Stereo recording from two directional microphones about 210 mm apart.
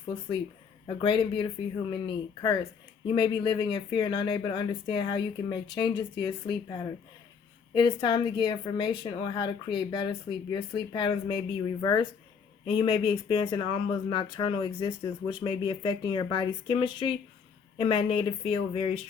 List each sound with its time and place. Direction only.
0.9 s speech: 25° left (ahead or behind)
7.7 s speech: 20° left (ahead or behind)